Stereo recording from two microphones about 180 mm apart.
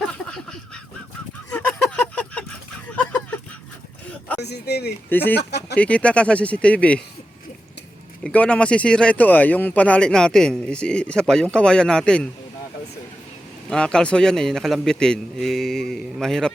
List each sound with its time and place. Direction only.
0.3 s a sound: 5° left (ahead or behind)
4.4 s speech: 65° left (ahead or behind)
5.0 s speech: 10° left (ahead or behind)
5.5 s speech: 65° left (ahead or behind)
5.7 s speech: 5° left (ahead or behind)
8.2 s speech: 5° left (ahead or behind)
13.7 s speech: 5° left (ahead or behind)